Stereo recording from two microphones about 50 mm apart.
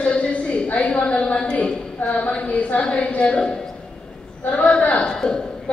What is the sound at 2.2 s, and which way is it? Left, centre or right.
A woman's voice, left.